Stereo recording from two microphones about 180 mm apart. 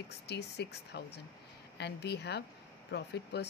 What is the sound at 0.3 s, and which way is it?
Speech, 70° left (ahead or behind).